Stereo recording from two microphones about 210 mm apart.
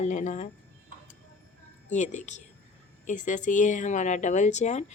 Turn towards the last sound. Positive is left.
turn(degrees=35)  # may be behind; listen again after turning